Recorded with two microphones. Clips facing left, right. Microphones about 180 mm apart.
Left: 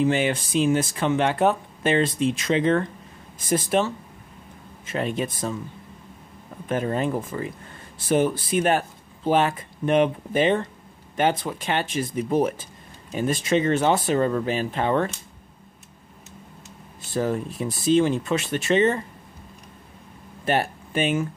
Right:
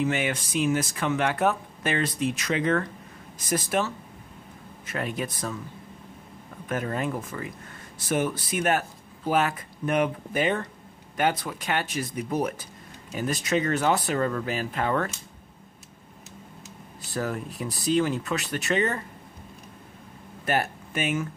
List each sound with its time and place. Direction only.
0.0 s speech: 30° left (ahead or behind)
6.7 s speech: 25° left (ahead or behind)
17.1 s speech: 25° left (ahead or behind)
20.4 s speech: 30° left (ahead or behind)